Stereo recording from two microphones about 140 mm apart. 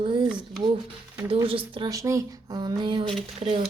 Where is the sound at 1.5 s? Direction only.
40° right (ahead or behind).